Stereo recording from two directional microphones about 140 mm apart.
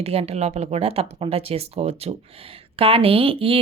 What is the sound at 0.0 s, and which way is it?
Speech, 45° right (ahead or behind).